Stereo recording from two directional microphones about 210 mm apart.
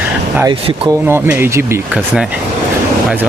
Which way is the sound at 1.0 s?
10° right (ahead or behind).